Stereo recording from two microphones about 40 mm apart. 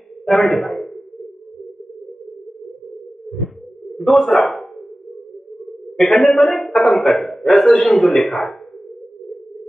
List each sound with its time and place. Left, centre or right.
0.2 s a man's voice: centre
3.9 s speech: centre
5.9 s a man's voice: centre